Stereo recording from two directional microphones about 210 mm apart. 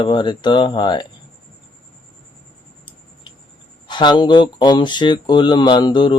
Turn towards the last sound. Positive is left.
turn(degrees=20)  # may be behind; listen again after turning